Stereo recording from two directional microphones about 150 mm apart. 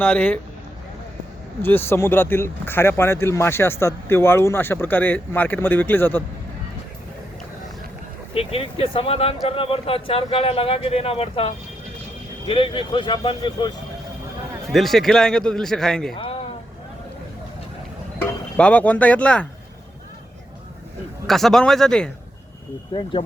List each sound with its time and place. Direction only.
0.0 s speech: 10° left (ahead or behind)
1.6 s speech: 15° left (ahead or behind)
8.4 s speech: 40° left (ahead or behind)
14.7 s a man's voice: centre (ahead or behind)
16.1 s a sound: 40° left (ahead or behind)
18.2 s speech: 10° left (ahead or behind)
21.2 s a man's voice: centre (ahead or behind)
22.9 s speech: 30° left (ahead or behind)